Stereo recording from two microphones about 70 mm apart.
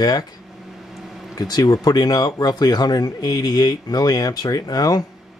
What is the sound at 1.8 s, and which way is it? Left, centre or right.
Speech, left.